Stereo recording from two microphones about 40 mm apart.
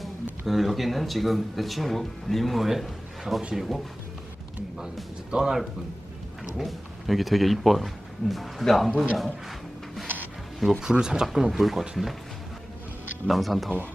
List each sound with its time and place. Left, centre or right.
0.4 s speech: centre
5.3 s speech: centre
6.6 s speech: centre
11.0 s speech: centre
13.2 s speech: centre